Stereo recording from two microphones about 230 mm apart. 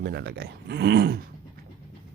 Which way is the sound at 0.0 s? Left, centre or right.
Right.